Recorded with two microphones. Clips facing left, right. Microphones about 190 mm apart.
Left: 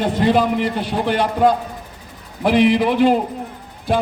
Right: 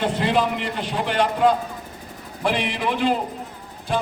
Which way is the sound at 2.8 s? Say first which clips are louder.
Left 7 dB; 40° left (ahead or behind).